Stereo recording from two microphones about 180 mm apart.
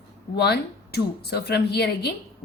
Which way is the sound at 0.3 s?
65° left (ahead or behind).